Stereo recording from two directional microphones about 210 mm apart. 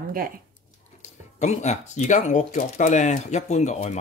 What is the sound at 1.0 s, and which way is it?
Speech, 35° left (ahead or behind).